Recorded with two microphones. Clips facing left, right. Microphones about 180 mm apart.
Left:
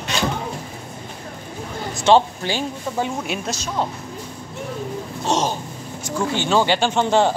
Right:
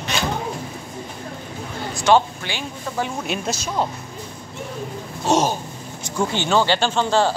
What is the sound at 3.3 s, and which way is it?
Speech, 10° left (ahead or behind).